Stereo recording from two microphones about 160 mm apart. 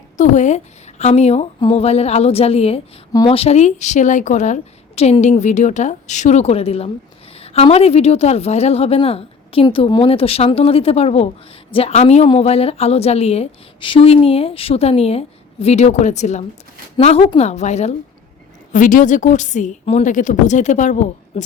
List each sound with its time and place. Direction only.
0.2 s a woman's voice: 50° left (ahead or behind)
18.7 s a woman's voice: 55° left (ahead or behind)